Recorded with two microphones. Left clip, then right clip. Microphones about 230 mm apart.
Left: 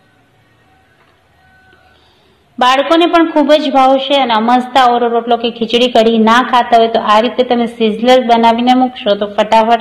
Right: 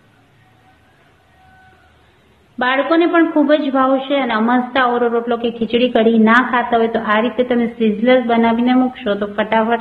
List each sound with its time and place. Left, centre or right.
2.6 s a woman's voice: centre